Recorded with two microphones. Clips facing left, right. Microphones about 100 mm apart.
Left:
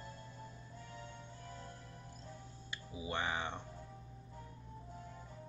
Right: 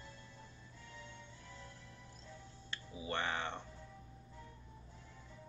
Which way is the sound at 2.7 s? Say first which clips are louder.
Even; 10° left (ahead or behind).